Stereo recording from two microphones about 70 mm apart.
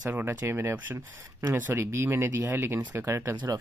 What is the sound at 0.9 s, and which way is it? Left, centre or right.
Speech, right.